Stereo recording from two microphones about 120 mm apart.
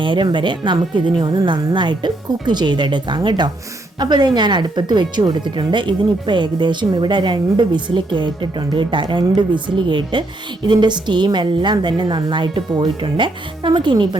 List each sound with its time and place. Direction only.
0.0 s speech: 40° right (ahead or behind)